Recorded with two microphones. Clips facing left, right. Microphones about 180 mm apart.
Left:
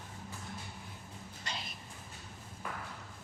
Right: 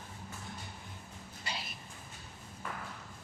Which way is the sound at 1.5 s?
5° right (ahead or behind).